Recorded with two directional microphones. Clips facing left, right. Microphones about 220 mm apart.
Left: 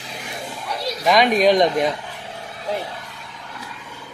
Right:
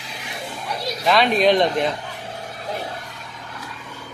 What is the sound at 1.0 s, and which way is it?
Speech, 15° left (ahead or behind).